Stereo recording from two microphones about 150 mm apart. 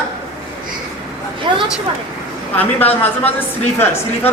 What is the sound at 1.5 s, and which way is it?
Speech, 35° right (ahead or behind).